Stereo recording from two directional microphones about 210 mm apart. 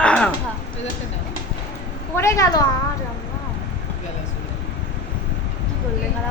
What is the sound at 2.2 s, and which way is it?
Speech, 15° left (ahead or behind).